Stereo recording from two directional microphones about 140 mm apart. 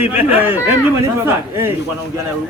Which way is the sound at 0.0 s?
10° right (ahead or behind).